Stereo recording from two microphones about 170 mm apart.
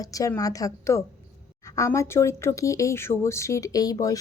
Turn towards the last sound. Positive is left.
turn(degrees=20)  # may be behind; listen again after turning